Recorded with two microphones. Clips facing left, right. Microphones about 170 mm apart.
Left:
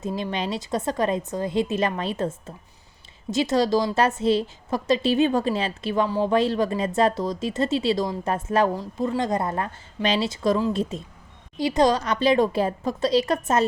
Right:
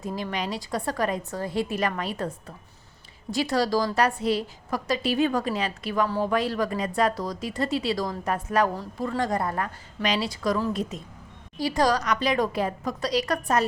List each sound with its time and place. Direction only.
0.2 s a woman's voice: 25° left (ahead or behind)
6.1 s speech: 15° left (ahead or behind)
6.3 s a woman's voice: 25° left (ahead or behind)